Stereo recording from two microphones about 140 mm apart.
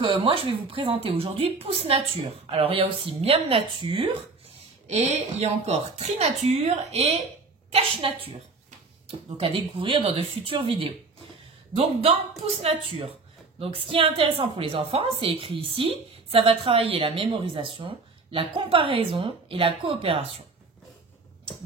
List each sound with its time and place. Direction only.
0.0 s a woman's voice: 40° right (ahead or behind)
4.8 s a woman's voice: 50° right (ahead or behind)